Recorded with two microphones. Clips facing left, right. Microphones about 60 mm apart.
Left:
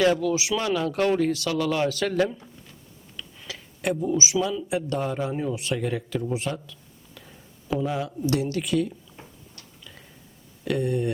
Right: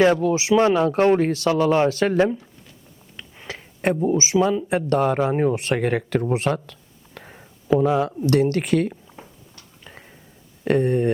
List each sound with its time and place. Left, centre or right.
0.2 s speech: right
9.8 s a sound: right
10.6 s speech: right